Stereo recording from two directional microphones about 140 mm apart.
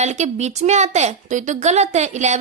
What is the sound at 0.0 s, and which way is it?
A woman's voice, 55° right (ahead or behind).